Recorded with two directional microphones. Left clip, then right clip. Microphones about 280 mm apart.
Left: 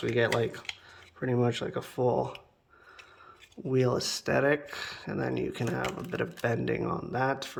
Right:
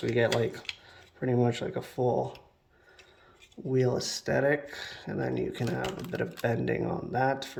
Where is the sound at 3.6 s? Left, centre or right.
Centre.